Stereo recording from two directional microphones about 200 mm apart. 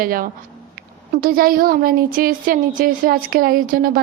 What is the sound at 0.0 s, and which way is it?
Speech, 45° right (ahead or behind).